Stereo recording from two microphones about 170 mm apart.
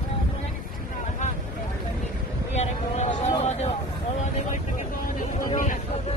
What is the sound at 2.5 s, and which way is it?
Vehicle, 40° left (ahead or behind).